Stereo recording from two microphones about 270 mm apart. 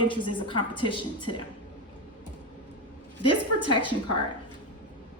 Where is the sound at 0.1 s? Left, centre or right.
Centre.